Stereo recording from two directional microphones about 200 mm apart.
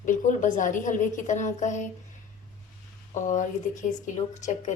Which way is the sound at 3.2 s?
40° left (ahead or behind).